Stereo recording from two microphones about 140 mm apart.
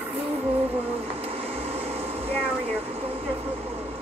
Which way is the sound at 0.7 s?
45° right (ahead or behind).